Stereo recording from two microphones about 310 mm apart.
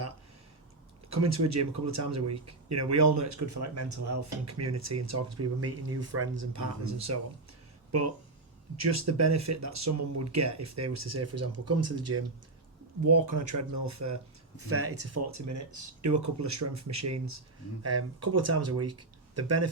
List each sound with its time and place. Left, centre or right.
1.1 s speech: right
8.7 s speech: right
13.1 s speech: right
14.7 s speech: right